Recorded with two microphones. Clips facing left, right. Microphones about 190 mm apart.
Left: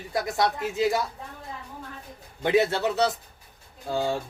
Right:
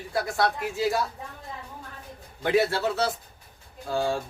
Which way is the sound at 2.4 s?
20° left (ahead or behind).